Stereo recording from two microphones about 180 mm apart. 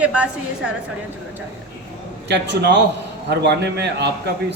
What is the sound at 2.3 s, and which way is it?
A man's voice, 70° right (ahead or behind).